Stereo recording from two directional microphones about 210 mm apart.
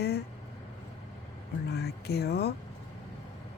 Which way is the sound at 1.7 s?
50° left (ahead or behind).